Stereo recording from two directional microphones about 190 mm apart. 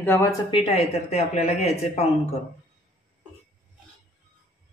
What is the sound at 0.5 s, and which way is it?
A man's voice, 30° left (ahead or behind).